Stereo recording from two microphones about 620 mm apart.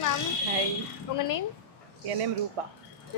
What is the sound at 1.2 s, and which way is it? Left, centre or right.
Speech, left.